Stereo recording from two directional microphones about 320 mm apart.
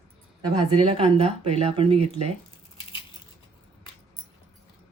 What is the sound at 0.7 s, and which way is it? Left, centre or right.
A woman's voice, centre.